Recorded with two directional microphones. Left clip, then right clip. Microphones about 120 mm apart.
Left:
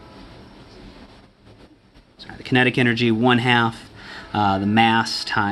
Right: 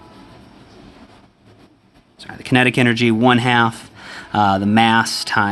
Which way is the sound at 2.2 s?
60° right (ahead or behind).